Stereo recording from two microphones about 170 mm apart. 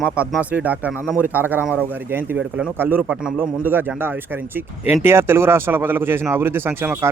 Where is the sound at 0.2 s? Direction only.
5° right (ahead or behind).